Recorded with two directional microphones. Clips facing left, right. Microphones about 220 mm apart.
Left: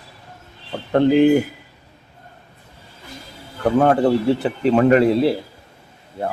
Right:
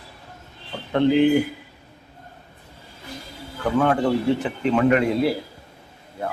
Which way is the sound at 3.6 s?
40° left (ahead or behind).